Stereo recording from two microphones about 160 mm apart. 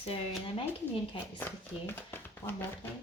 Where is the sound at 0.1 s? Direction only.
35° left (ahead or behind).